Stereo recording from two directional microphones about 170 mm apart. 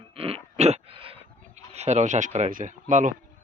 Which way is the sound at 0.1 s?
35° right (ahead or behind).